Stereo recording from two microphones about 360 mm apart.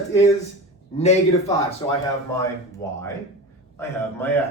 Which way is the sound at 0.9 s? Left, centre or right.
Centre.